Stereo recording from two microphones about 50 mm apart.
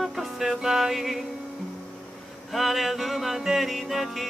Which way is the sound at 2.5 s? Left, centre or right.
Centre.